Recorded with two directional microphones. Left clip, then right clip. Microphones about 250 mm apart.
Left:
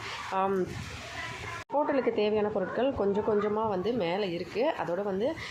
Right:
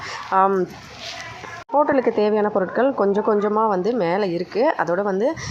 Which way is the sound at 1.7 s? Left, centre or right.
Right.